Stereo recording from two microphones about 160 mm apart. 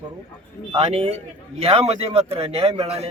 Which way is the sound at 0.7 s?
40° right (ahead or behind).